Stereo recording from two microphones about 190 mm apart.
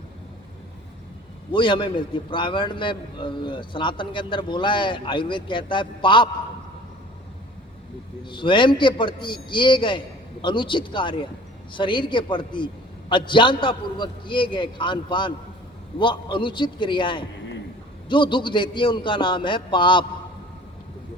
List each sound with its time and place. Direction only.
1.5 s a man's voice: 25° left (ahead or behind)
8.2 s a man's voice: 25° left (ahead or behind)